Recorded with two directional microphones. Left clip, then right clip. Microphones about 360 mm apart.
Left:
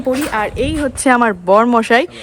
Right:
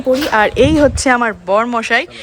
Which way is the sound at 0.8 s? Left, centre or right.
Centre.